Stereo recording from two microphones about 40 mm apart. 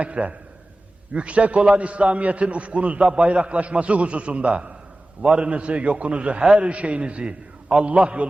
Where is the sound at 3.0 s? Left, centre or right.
Right.